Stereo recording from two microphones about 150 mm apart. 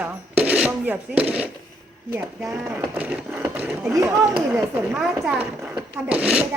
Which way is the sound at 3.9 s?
20° right (ahead or behind).